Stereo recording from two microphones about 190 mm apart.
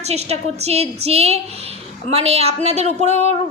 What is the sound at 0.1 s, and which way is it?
A woman's voice, 35° right (ahead or behind).